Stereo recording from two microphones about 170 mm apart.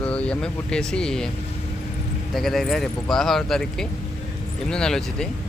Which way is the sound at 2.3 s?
Centre (ahead or behind).